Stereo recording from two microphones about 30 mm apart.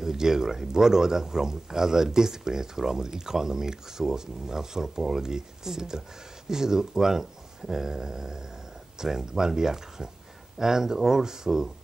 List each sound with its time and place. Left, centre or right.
0.0 s speech: centre